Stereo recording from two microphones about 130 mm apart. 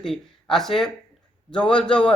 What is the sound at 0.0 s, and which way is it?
A man's voice, 5° left (ahead or behind).